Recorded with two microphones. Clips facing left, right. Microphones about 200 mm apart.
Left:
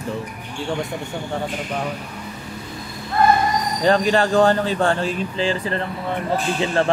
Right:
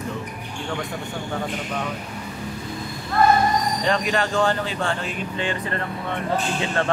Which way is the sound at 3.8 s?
35° left (ahead or behind).